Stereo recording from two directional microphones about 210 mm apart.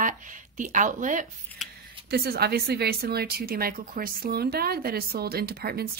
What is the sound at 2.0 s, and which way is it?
Speech, 50° right (ahead or behind).